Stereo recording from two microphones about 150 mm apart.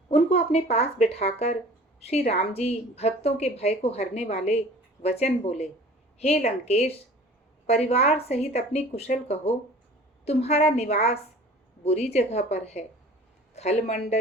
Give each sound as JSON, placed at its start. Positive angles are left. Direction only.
{"t": 0.1, "sound": "a woman's voice", "side_deg": 45}